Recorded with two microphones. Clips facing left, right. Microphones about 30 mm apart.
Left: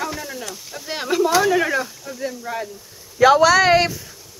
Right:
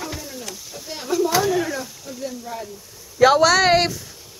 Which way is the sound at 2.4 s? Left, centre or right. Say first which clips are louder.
Left 4 dB; left.